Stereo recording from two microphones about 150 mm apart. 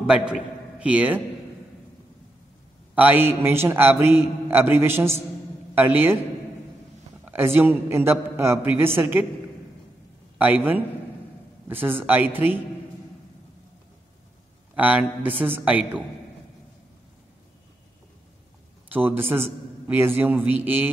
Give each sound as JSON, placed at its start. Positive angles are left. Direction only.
{"t": 0.0, "sound": "a man's voice", "side_deg": -5}
{"t": 2.9, "sound": "a man's voice", "side_deg": -10}
{"t": 7.2, "sound": "a man's voice", "side_deg": -15}
{"t": 10.3, "sound": "a man's voice", "side_deg": -10}
{"t": 14.8, "sound": "a man's voice", "side_deg": -10}
{"t": 18.9, "sound": "a man's voice", "side_deg": -15}